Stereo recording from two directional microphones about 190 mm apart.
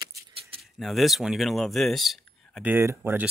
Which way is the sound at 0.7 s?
Centre (ahead or behind).